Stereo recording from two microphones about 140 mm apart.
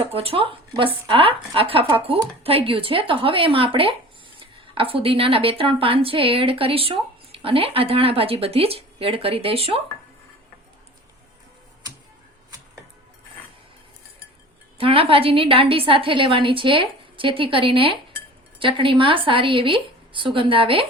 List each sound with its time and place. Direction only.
0.0 s speech: 45° right (ahead or behind)
14.8 s speech: 40° right (ahead or behind)